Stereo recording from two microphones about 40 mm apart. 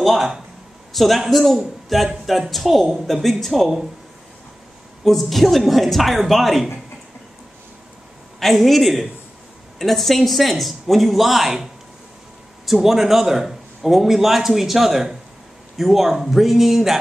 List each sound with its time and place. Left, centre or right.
0.0 s a sound: centre
0.9 s speech: centre
5.0 s speech: centre
8.4 s a man's voice: centre